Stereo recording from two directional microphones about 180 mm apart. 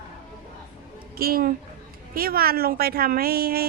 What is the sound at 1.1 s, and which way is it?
A woman's voice, 55° right (ahead or behind).